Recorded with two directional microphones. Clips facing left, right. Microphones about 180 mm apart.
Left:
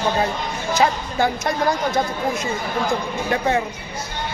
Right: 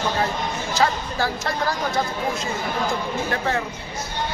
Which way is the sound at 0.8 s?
20° left (ahead or behind).